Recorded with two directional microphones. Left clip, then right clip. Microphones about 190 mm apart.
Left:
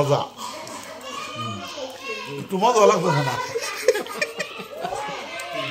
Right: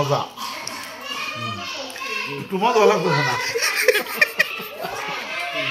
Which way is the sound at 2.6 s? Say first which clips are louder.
Even; 70° left (ahead or behind).